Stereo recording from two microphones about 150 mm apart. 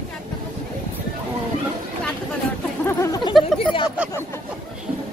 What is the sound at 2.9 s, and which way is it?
Speech, 20° left (ahead or behind).